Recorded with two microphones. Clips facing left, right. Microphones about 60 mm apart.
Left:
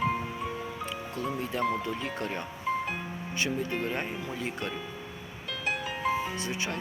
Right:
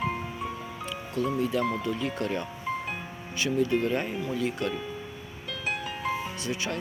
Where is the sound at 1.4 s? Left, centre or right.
Left.